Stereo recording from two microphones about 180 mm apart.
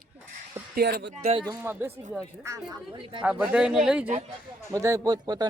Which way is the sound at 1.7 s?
15° right (ahead or behind).